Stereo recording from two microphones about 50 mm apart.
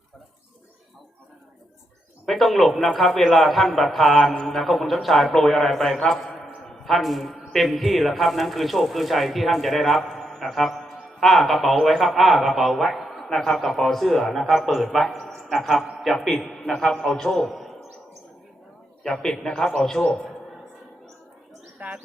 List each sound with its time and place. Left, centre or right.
2.2 s a man's voice: centre
16.1 s a man's voice: centre
19.0 s a man's voice: centre
21.8 s bird: right